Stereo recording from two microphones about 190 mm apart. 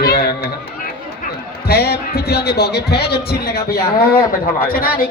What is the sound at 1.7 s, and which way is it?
Speech, 55° left (ahead or behind).